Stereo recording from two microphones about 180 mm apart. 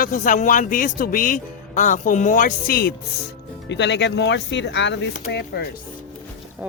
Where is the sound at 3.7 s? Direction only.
75° left (ahead or behind).